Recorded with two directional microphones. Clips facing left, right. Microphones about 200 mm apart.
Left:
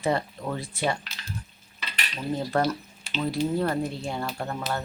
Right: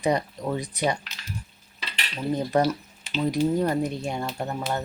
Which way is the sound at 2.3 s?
15° right (ahead or behind).